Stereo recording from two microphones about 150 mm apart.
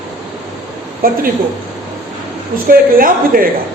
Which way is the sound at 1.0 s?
75° right (ahead or behind).